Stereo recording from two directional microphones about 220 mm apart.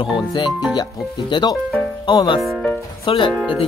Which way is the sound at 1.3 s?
20° left (ahead or behind).